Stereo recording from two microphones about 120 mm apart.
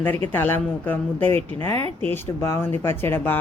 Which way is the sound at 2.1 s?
20° left (ahead or behind).